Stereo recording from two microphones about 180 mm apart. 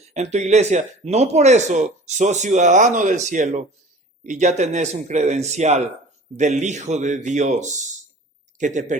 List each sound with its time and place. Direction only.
0.0 s speech: 40° right (ahead or behind)